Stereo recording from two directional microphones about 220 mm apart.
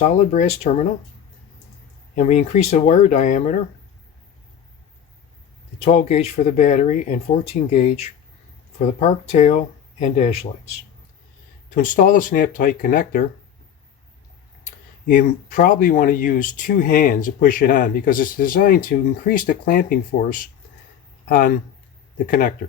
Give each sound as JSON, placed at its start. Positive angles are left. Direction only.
{"t": 0.0, "sound": "speech", "side_deg": 30}
{"t": 2.1, "sound": "speech", "side_deg": 30}
{"t": 5.8, "sound": "speech", "side_deg": 30}
{"t": 11.7, "sound": "speech", "side_deg": 40}
{"t": 14.6, "sound": "speech", "side_deg": 40}